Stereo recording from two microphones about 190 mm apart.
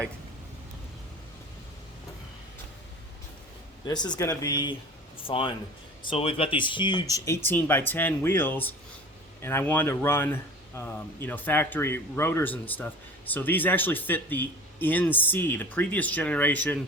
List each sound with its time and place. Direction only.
3.8 s speech: 20° left (ahead or behind)